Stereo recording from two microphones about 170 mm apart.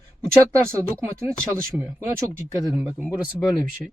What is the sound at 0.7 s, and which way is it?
Speech, 15° right (ahead or behind).